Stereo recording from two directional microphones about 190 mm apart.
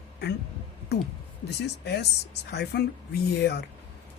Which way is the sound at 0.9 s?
60° left (ahead or behind).